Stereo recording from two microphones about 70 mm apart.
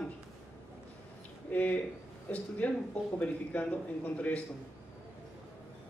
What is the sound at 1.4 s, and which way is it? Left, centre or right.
Speech, left.